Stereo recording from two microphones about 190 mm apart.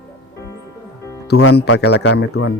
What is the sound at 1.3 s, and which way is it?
Speech, 60° left (ahead or behind).